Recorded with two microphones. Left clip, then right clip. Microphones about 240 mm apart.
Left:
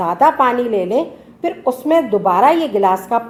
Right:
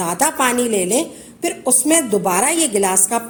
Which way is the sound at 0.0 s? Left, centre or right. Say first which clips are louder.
Left 5 dB; right.